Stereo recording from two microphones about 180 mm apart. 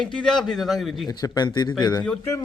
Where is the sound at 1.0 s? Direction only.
20° left (ahead or behind).